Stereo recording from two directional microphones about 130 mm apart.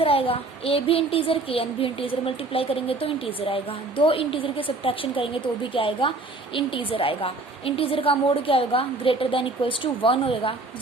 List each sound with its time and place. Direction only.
0.0 s a child's voice: 45° left (ahead or behind)